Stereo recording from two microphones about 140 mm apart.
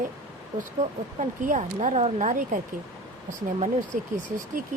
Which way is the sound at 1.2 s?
65° right (ahead or behind).